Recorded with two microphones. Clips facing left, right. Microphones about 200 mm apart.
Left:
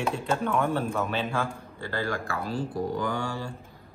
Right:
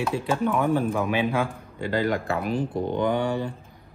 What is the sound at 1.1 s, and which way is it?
A man's voice, 15° right (ahead or behind).